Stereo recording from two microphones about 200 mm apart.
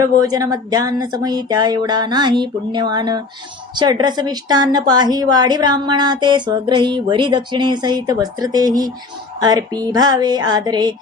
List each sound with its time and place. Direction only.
0.0 s a woman's voice: 20° right (ahead or behind)